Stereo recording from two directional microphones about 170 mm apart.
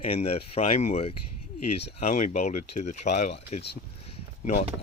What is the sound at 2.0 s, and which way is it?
Speech, 50° left (ahead or behind).